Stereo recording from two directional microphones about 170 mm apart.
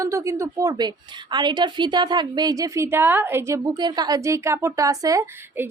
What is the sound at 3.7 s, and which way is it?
A woman's voice, 25° right (ahead or behind).